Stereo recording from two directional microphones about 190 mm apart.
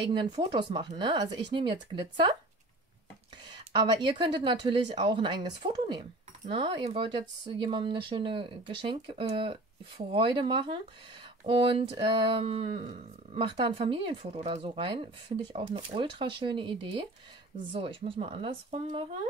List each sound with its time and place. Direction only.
0.1 s speech: 25° right (ahead or behind)
3.8 s speech: 25° right (ahead or behind)